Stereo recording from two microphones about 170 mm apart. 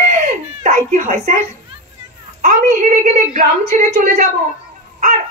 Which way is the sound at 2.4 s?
45° right (ahead or behind).